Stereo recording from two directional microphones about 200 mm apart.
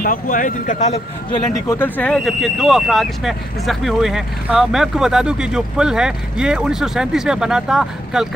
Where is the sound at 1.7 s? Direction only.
10° left (ahead or behind).